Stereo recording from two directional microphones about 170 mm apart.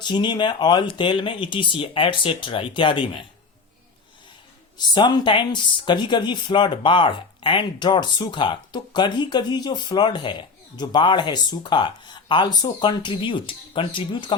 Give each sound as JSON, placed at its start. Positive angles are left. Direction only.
{"t": 0.0, "sound": "speech", "side_deg": 25}
{"t": 4.8, "sound": "speech", "side_deg": 25}